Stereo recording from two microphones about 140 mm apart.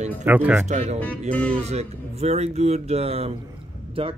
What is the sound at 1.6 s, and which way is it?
Speech, 50° right (ahead or behind).